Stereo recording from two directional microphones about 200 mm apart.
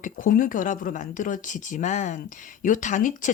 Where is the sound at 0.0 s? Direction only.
45° left (ahead or behind).